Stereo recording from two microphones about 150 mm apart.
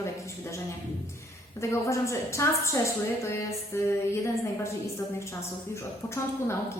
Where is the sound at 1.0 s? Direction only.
20° left (ahead or behind).